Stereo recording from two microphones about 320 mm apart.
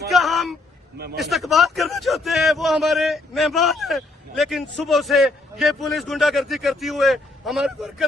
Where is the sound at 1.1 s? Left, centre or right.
Centre.